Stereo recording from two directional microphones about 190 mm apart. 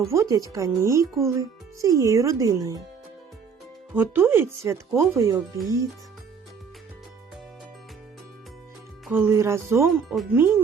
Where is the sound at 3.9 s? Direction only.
10° right (ahead or behind).